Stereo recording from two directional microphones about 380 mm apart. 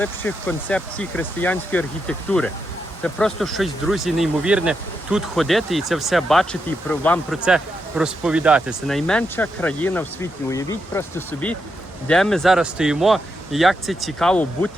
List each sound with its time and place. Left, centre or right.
0.0 s speech: centre